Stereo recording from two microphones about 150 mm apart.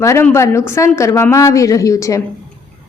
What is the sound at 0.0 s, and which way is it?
A woman's voice, 20° left (ahead or behind).